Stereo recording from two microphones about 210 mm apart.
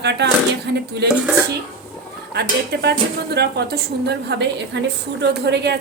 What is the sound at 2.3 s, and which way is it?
A woman's voice, 50° right (ahead or behind).